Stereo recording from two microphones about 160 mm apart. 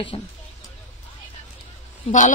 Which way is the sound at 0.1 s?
35° left (ahead or behind).